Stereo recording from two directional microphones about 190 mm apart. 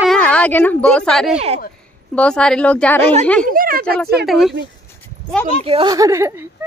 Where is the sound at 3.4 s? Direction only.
50° right (ahead or behind).